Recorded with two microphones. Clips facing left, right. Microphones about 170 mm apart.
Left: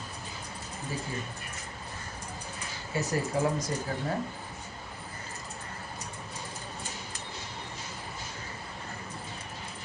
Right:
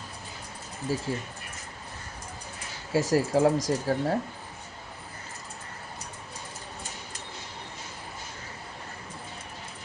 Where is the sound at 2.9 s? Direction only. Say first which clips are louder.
Right 6 dB; 90° right.